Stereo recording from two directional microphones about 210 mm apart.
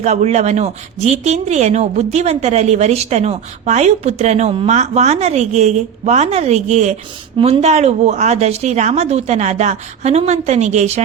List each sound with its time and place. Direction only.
0.0 s speech: 30° right (ahead or behind)